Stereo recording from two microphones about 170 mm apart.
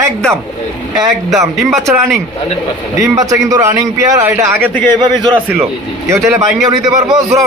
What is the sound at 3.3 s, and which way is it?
A man's voice, 20° right (ahead or behind).